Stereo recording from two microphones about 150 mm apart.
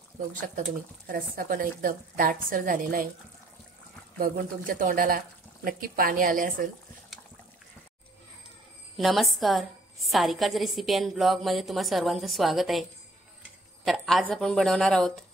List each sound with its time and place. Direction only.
0.3 s speech: 60° right (ahead or behind)
1.0 s speech: 75° right (ahead or behind)
4.2 s speech: 65° right (ahead or behind)
8.9 s a woman's voice: centre (ahead or behind)
13.8 s a woman's voice: centre (ahead or behind)